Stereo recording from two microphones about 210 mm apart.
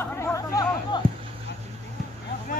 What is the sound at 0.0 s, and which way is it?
Chatter, 10° left (ahead or behind).